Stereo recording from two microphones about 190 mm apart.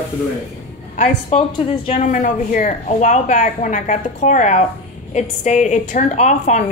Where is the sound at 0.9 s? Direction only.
40° left (ahead or behind).